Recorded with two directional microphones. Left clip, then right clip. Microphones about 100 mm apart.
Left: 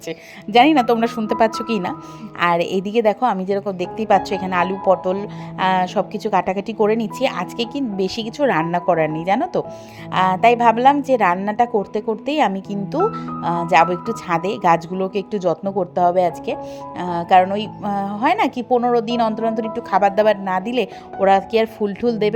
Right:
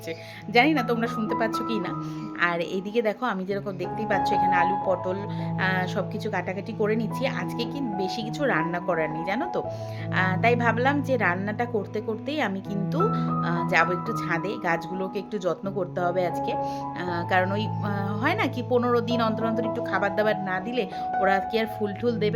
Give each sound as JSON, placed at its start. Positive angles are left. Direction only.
{"t": 0.5, "sound": "a woman's voice", "side_deg": 90}
{"t": 6.7, "sound": "a woman's voice", "side_deg": 90}
{"t": 10.2, "sound": "a woman's voice", "side_deg": 90}
{"t": 17.4, "sound": "a woman's voice", "side_deg": 50}
{"t": 18.7, "sound": "speech", "side_deg": 40}
{"t": 19.0, "sound": "speech", "side_deg": 55}
{"t": 19.9, "sound": "speech", "side_deg": 85}
{"t": 21.8, "sound": "a woman's voice", "side_deg": 55}